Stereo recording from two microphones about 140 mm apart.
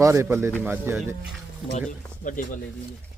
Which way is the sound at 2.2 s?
70° left (ahead or behind).